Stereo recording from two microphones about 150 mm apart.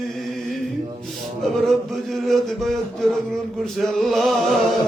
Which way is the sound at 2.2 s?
Centre (ahead or behind).